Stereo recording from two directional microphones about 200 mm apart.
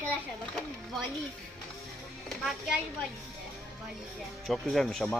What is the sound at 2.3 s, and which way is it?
Speech, centre (ahead or behind).